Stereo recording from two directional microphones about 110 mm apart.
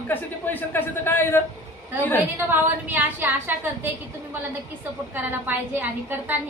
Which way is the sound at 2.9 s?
15° right (ahead or behind).